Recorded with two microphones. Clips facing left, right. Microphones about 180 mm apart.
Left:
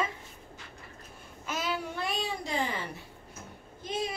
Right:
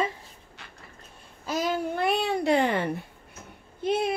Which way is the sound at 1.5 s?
40° right (ahead or behind).